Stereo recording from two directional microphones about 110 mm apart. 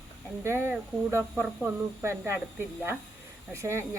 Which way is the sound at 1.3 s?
10° right (ahead or behind).